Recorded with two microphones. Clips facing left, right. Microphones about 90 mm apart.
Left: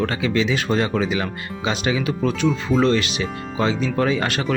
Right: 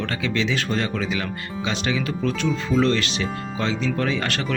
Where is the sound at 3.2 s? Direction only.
20° left (ahead or behind).